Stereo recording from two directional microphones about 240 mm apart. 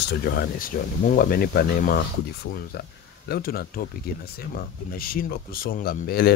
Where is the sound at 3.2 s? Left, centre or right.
Left.